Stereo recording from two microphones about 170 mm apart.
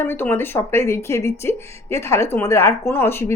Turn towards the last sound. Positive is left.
turn(degrees=15)  # may be behind; listen again after turning